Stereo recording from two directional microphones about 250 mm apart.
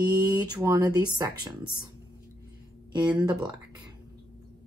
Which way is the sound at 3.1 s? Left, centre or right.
Centre.